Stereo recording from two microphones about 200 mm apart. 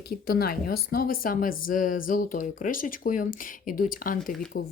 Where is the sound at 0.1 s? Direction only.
50° left (ahead or behind).